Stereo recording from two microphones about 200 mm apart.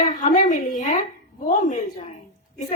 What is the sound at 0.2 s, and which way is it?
Speech, 40° left (ahead or behind).